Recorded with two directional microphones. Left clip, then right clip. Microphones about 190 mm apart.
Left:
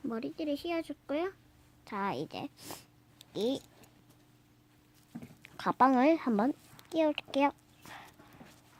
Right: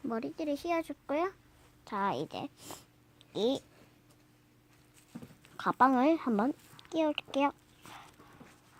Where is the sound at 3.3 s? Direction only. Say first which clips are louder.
Right 2 dB; 10° right (ahead or behind).